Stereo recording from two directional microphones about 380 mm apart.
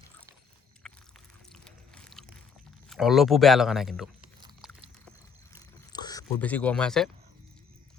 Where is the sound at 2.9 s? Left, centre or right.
Centre.